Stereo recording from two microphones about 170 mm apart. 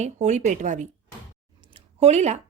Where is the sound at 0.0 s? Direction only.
45° right (ahead or behind).